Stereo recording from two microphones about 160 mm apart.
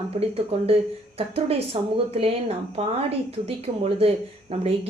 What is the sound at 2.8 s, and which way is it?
Speech, 40° right (ahead or behind).